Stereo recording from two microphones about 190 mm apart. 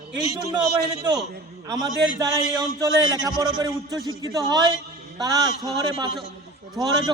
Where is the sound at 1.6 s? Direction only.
20° right (ahead or behind).